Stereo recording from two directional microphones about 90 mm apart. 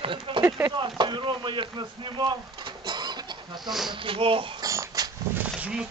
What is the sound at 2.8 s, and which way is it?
Chicken, 55° right (ahead or behind).